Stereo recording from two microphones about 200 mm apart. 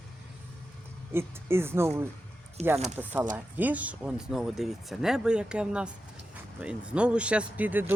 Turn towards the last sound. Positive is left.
turn(degrees=-10)  # may be behind; listen again after turning